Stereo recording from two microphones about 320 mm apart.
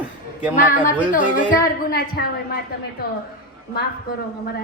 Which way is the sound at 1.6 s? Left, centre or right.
Left.